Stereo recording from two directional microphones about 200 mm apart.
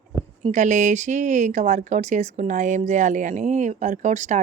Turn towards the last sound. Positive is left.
turn(degrees=-35)  # may be behind; listen again after turning